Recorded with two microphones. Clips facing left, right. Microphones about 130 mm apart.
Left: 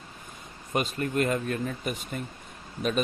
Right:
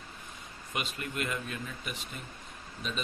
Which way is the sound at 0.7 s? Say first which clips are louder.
Left 9 dB; 40° left (ahead or behind).